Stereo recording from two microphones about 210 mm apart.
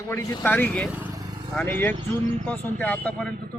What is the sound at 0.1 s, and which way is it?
A man's voice, 10° left (ahead or behind).